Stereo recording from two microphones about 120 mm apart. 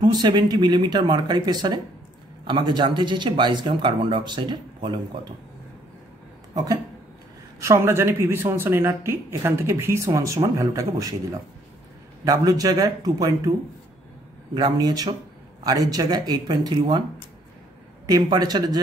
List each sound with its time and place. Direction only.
0.0 s speech: 35° right (ahead or behind)
6.5 s speech: 30° right (ahead or behind)
12.3 s speech: 30° right (ahead or behind)
18.0 s speech: 35° right (ahead or behind)